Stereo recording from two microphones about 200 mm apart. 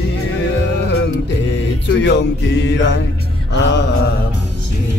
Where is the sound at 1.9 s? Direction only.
65° left (ahead or behind).